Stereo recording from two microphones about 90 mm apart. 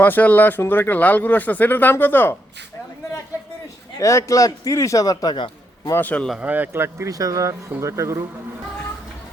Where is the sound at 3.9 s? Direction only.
35° left (ahead or behind).